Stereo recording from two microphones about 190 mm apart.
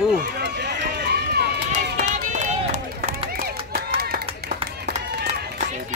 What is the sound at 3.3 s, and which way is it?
Run, 55° right (ahead or behind).